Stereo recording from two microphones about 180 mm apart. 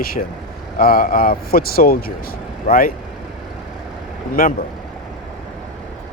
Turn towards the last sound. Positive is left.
turn(degrees=55)  # may be behind; listen again after turning